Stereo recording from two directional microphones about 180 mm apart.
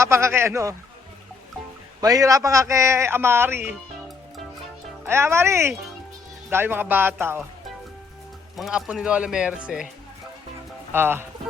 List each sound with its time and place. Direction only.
0.0 s a man's voice: 15° right (ahead or behind)
2.0 s a man's voice: 20° right (ahead or behind)
5.0 s a man's voice: 15° right (ahead or behind)
8.5 s speech: centre (ahead or behind)
10.9 s a man's voice: 10° right (ahead or behind)